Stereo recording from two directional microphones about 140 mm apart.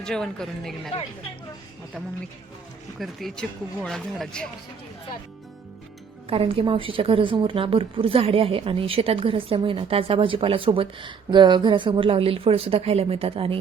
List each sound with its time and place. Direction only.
0.0 s speech: 5° left (ahead or behind)
3.0 s speech: centre (ahead or behind)
6.2 s a woman's voice: 45° right (ahead or behind)